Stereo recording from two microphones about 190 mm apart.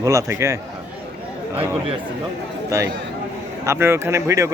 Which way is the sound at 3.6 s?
15° right (ahead or behind).